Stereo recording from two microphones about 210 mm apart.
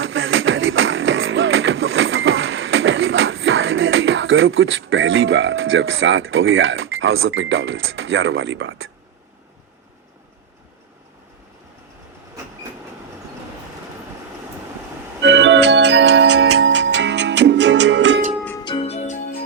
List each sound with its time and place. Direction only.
0.0 s music: 65° right (ahead or behind)
15.2 s organ: 60° right (ahead or behind)
18.6 s music: 25° left (ahead or behind)